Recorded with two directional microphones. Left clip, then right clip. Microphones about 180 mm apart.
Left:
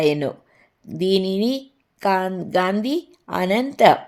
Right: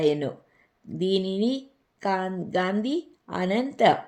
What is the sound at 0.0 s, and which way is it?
Speech, 40° left (ahead or behind).